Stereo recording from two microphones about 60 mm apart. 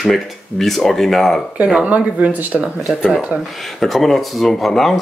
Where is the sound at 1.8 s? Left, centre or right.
Right.